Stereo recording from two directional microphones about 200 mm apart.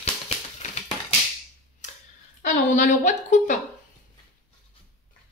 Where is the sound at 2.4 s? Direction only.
40° left (ahead or behind).